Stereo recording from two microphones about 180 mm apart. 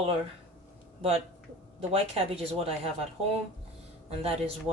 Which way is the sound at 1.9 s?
30° right (ahead or behind).